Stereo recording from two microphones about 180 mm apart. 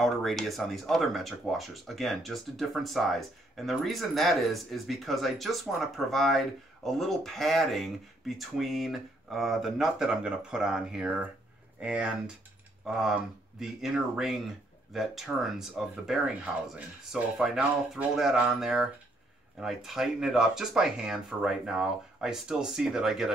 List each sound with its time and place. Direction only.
0.0 s speech: centre (ahead or behind)